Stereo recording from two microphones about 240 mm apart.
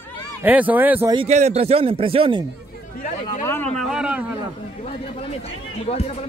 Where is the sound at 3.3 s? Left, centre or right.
Centre.